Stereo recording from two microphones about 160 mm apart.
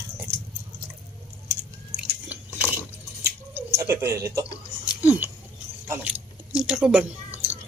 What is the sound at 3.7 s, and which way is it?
Speech, 20° right (ahead or behind).